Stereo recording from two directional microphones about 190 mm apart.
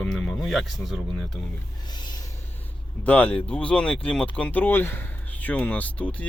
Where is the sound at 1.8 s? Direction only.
25° left (ahead or behind).